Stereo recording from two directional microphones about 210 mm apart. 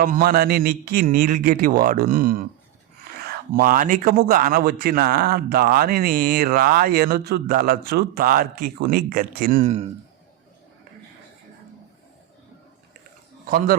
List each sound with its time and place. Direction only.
0.0 s speech: 45° right (ahead or behind)
13.5 s a man's voice: 40° right (ahead or behind)